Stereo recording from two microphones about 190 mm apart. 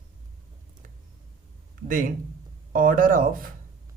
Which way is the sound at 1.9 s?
45° right (ahead or behind).